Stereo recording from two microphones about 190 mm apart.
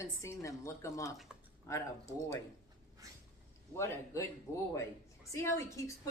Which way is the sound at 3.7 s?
15° left (ahead or behind).